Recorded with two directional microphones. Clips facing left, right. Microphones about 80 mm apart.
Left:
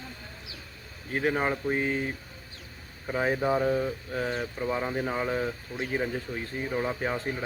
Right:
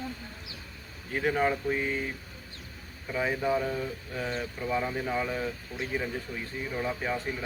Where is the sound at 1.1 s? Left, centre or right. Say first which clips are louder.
Even; left.